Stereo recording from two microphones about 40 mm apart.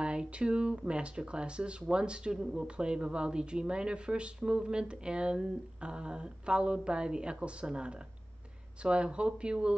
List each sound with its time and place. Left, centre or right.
0.0 s speech: right
2.3 s speech: centre
2.6 s speech: right